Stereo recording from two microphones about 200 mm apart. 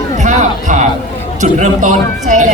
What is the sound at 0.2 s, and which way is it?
Music, 35° right (ahead or behind).